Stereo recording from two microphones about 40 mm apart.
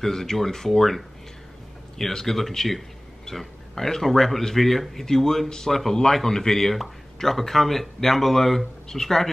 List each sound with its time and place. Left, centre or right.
0.0 s speech: centre